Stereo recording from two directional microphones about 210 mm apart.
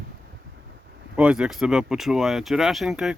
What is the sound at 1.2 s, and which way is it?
Speech, 5° right (ahead or behind).